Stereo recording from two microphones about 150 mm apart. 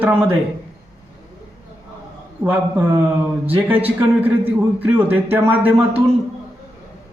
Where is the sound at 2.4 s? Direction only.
15° right (ahead or behind).